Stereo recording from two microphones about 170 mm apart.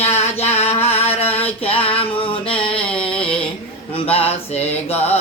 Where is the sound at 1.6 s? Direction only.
35° left (ahead or behind).